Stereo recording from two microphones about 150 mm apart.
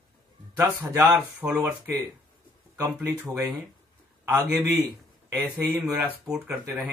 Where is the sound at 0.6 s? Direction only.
10° right (ahead or behind).